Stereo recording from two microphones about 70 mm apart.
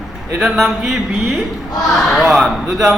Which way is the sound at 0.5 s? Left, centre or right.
Centre.